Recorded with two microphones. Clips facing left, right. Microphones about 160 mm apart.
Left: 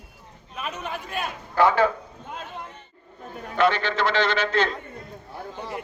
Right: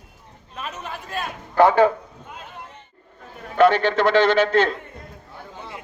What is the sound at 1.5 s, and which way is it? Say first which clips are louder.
Speech: right 4 dB; 50° right (ahead or behind).